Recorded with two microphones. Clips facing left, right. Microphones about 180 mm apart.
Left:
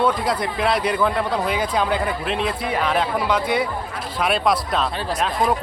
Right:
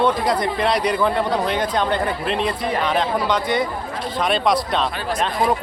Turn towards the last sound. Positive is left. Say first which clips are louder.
# right 1 dB
turn(degrees=0)  # may be behind; listen again after turning